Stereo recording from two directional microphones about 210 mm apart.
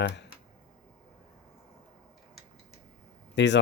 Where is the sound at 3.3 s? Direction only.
60° left (ahead or behind).